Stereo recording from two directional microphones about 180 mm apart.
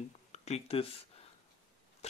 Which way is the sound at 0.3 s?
35° left (ahead or behind).